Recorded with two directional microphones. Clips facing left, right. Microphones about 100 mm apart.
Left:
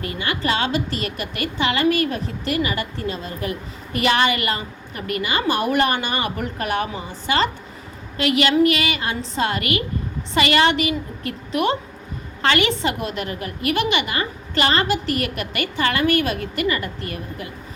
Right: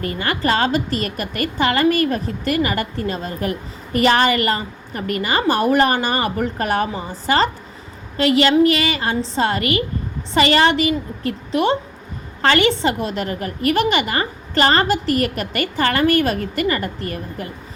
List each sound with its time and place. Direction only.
0.0 s a woman's voice: 45° right (ahead or behind)